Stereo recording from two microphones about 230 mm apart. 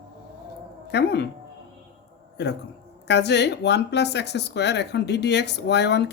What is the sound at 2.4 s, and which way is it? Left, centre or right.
Speech, left.